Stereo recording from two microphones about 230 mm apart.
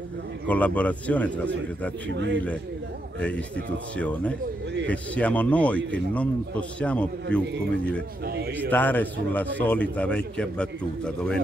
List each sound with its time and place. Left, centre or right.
0.5 s speech: centre
2.0 s a man's voice: right
3.2 s a man's voice: centre
8.6 s a man's voice: centre